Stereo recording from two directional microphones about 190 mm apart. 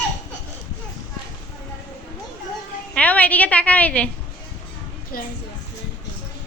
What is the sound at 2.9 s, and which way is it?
A woman's voice, 5° left (ahead or behind).